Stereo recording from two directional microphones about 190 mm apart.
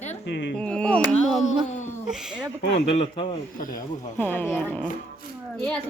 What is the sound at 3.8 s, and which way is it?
A woman's voice, 10° left (ahead or behind).